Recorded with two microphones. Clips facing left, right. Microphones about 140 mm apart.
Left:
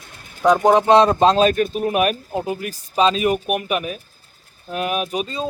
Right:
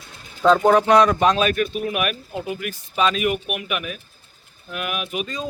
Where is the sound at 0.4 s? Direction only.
15° left (ahead or behind).